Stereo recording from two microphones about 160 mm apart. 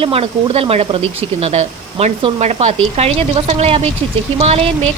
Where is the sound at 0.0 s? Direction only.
35° right (ahead or behind).